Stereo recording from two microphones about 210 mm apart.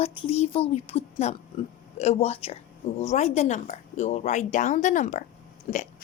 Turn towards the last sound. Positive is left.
turn(degrees=35)  # may be behind; listen again after turning